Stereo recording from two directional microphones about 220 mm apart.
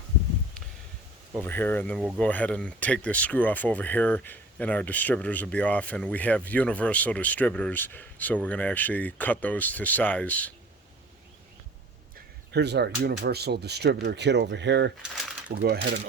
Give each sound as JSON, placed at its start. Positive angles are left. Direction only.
{"t": 1.5, "sound": "speech", "side_deg": 10}
{"t": 12.5, "sound": "speech", "side_deg": -50}